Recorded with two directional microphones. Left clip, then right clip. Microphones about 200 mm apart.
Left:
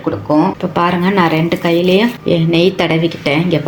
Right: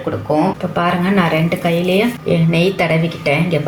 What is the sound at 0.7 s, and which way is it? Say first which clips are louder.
Speech: left 4 dB; 50° left (ahead or behind).